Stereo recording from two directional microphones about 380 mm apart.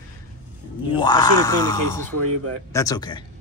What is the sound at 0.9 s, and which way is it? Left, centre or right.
Speech, centre.